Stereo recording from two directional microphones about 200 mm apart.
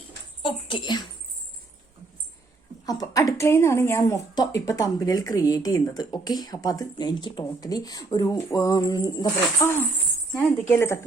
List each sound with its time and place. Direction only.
0.4 s speech: 25° left (ahead or behind)
2.8 s a woman's voice: 20° left (ahead or behind)